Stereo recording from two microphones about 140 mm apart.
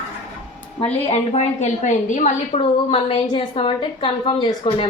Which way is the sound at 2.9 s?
40° left (ahead or behind).